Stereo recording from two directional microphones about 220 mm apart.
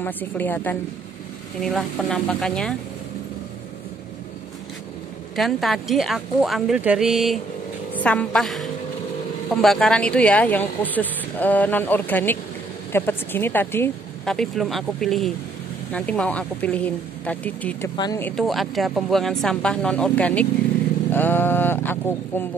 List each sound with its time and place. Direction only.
0.0 s speech: 10° left (ahead or behind)
5.3 s a woman's voice: centre (ahead or behind); by 18.3 s 15° left (ahead or behind)
18.3 s speech: centre (ahead or behind)